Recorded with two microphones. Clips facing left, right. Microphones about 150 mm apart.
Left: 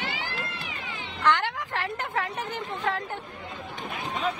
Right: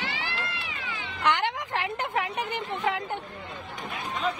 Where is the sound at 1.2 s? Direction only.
15° right (ahead or behind).